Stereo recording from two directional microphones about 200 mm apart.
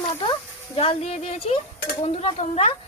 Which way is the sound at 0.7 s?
30° left (ahead or behind).